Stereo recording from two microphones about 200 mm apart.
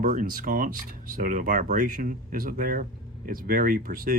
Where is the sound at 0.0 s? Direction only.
40° right (ahead or behind).